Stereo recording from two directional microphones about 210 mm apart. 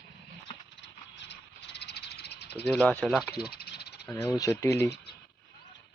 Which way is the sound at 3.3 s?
45° left (ahead or behind).